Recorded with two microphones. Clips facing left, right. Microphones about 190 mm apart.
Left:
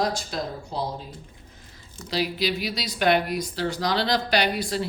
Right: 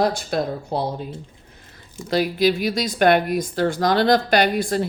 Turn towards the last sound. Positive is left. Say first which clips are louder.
# right 6 dB
turn(degrees=-50)  # may be behind; listen again after turning